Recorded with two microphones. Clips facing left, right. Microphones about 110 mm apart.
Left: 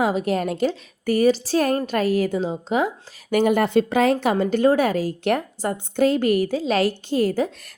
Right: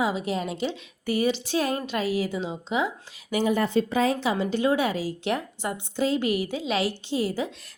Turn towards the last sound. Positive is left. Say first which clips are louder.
# left 6 dB
turn(degrees=45)  # may be behind; listen again after turning